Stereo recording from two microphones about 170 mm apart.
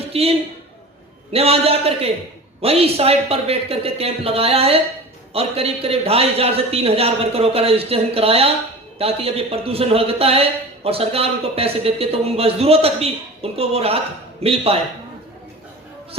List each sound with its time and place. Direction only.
0.1 s a man's voice: 35° right (ahead or behind)